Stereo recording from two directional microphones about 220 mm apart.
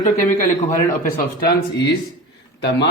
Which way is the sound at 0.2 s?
15° left (ahead or behind).